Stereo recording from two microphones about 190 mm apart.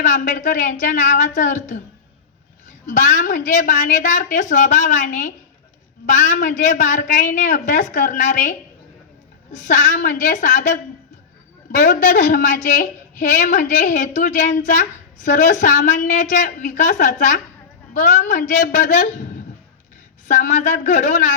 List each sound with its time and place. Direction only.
0.0 s a woman's voice: 45° left (ahead or behind)
2.8 s a woman's voice: 40° left (ahead or behind)